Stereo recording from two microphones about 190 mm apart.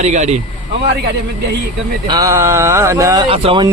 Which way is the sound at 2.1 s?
20° right (ahead or behind).